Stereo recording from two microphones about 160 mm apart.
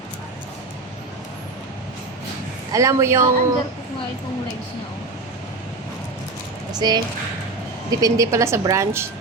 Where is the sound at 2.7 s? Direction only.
20° right (ahead or behind).